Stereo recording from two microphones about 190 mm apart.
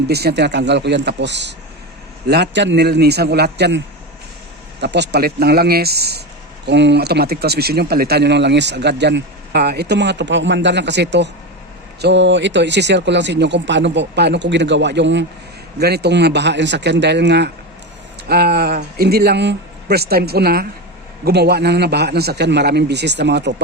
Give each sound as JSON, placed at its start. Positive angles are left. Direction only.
{"t": 0.1, "sound": "speech", "side_deg": -60}